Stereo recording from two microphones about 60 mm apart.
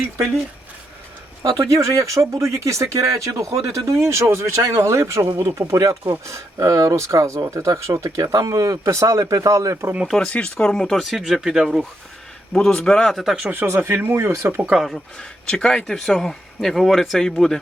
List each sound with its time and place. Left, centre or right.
1.4 s speech: right
10.2 s speech: left
10.8 s speech: centre
12.5 s a man's voice: centre
13.5 s speech: right
14.7 s speech: centre
15.4 s a man's voice: centre